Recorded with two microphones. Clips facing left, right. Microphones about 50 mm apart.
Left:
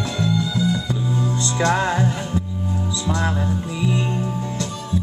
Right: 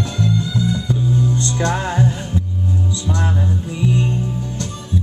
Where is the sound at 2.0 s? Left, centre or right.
Centre.